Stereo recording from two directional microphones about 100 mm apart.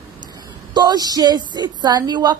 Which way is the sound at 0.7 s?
40° right (ahead or behind).